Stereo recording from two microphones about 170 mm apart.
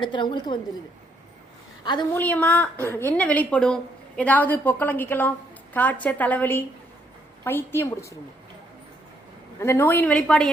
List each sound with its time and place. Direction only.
0.0 s a woman's voice: 30° left (ahead or behind)
1.8 s a woman's voice: 25° left (ahead or behind)
2.1 s a woman's voice: 10° left (ahead or behind)
9.6 s a woman's voice: 15° left (ahead or behind)